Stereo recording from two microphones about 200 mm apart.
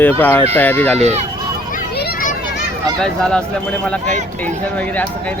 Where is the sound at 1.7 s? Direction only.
50° left (ahead or behind).